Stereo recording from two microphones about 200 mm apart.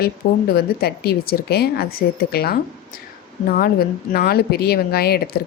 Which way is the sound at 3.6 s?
50° left (ahead or behind).